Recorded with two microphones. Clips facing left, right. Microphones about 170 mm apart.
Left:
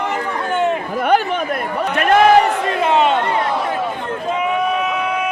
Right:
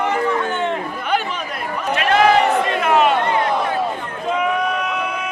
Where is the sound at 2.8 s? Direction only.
25° left (ahead or behind).